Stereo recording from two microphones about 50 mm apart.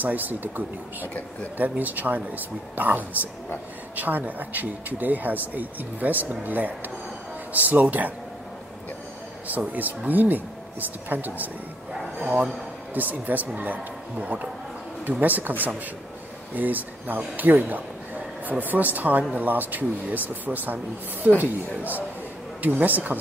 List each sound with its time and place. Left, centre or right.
0.0 s speech: right
1.0 s speech: left
1.6 s speech: right
9.7 s speech: right
11.9 s dog: centre
12.9 s speech: right